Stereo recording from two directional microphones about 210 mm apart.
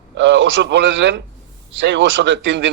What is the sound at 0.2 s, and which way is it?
A man's voice, 60° right (ahead or behind).